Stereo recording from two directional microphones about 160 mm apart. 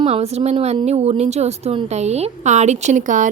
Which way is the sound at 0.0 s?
40° right (ahead or behind).